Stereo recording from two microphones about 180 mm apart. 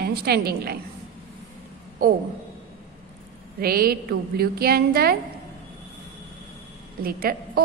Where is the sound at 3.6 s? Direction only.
55° right (ahead or behind).